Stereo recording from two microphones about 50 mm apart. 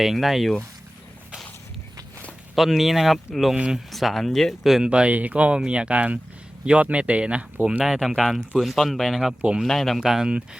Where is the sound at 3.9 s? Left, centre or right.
Centre.